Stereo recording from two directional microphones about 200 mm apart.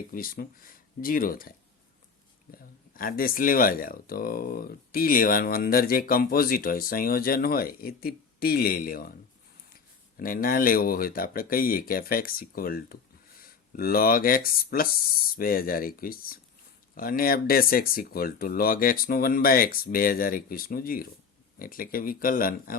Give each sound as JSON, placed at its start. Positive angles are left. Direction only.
{"t": 0.1, "sound": "speech", "side_deg": 45}
{"t": 10.2, "sound": "speech", "side_deg": 45}